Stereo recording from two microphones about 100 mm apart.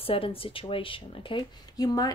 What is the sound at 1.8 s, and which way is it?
Speech, 40° left (ahead or behind).